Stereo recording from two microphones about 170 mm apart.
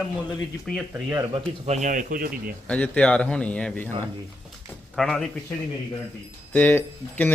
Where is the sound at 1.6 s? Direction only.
45° right (ahead or behind); by 2.5 s 60° right (ahead or behind).